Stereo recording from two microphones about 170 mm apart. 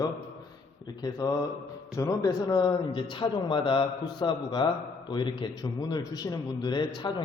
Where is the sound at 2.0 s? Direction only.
20° left (ahead or behind).